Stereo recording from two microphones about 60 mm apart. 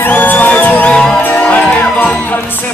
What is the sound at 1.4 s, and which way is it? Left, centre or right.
Music, left.